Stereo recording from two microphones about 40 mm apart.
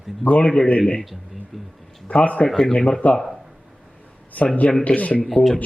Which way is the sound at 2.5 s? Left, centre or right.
Centre.